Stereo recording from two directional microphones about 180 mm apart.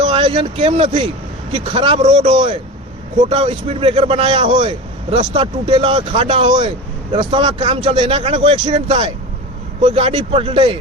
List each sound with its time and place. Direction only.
0.0 s speech: 30° right (ahead or behind)